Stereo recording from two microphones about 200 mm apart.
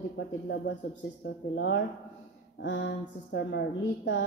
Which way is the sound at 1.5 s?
60° left (ahead or behind).